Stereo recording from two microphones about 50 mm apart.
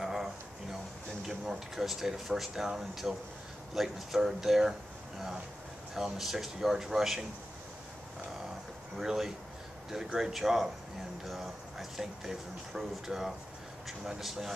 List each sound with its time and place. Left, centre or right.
0.0 s a sound: centre
1.4 s speech: centre
5.9 s speech: centre
8.9 s speech: centre